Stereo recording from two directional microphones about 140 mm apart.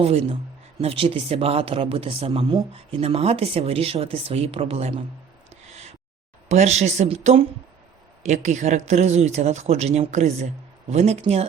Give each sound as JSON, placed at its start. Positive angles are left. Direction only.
{"t": 0.0, "sound": "speech", "side_deg": -45}
{"t": 5.6, "sound": "a sound", "side_deg": -55}
{"t": 6.5, "sound": "speech", "side_deg": -55}